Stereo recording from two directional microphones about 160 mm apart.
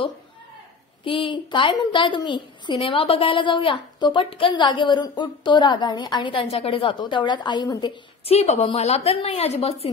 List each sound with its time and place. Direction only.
1.0 s a woman's voice: 35° left (ahead or behind)
8.3 s a woman's voice: 40° left (ahead or behind)